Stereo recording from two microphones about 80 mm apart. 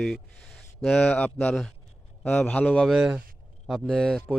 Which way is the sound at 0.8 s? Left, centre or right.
Centre.